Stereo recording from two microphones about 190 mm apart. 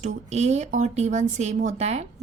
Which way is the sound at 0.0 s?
35° right (ahead or behind).